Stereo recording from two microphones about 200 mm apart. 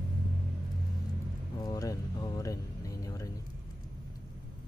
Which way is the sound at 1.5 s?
15° left (ahead or behind).